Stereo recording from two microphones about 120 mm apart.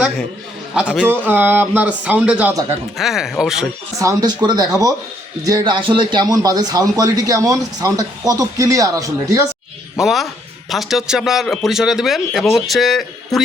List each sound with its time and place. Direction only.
1.0 s a man's voice: 15° right (ahead or behind)
3.9 s a man's voice: 25° right (ahead or behind)
5.5 s a man's voice: 40° right (ahead or behind)
10.0 s a man's voice: centre (ahead or behind)